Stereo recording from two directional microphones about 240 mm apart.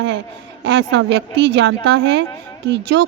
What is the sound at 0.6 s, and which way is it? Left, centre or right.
A woman's voice, right.